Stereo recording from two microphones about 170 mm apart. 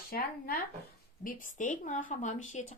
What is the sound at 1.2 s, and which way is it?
Speech, 50° left (ahead or behind).